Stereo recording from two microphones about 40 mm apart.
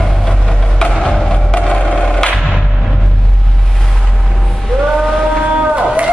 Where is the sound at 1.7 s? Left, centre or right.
Left.